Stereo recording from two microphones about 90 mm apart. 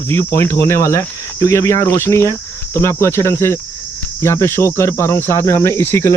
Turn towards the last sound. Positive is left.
turn(degrees=25)  # may be behind; listen again after turning